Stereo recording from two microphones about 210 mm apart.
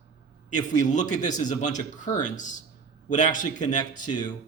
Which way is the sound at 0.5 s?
35° left (ahead or behind).